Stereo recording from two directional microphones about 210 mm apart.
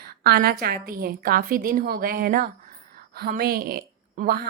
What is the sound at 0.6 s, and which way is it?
A woman's voice, 45° right (ahead or behind).